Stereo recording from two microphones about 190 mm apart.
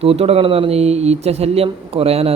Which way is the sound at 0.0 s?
30° right (ahead or behind).